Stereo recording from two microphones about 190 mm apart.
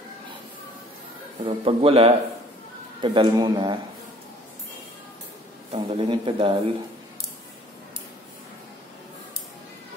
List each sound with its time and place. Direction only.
1.4 s a man's voice: 30° right (ahead or behind)
5.7 s a man's voice: 25° right (ahead or behind)